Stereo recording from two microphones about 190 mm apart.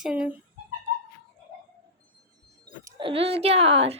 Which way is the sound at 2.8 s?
25° right (ahead or behind).